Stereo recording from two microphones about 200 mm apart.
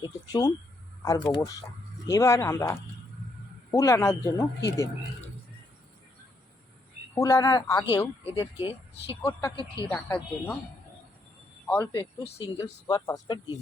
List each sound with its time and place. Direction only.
0.0 s speech: 20° left (ahead or behind)
7.2 s speech: 15° left (ahead or behind)
9.2 s speech: 15° left (ahead or behind)
11.7 s speech: 15° left (ahead or behind)
12.2 s speech: 30° left (ahead or behind)
12.5 s speech: 20° left (ahead or behind)